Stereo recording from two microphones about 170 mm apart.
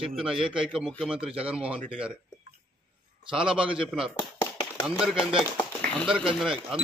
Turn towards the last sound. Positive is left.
turn(degrees=0)  # may be behind; listen again after turning